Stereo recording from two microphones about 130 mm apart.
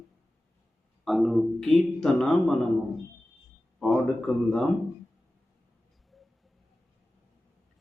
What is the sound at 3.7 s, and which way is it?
Speech, centre (ahead or behind).